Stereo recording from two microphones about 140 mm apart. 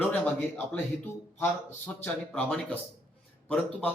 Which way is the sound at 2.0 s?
5° left (ahead or behind).